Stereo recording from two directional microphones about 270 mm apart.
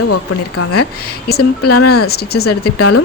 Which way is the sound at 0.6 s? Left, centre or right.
Left.